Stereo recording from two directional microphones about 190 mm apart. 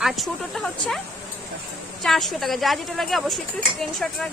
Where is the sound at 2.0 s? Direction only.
Centre (ahead or behind).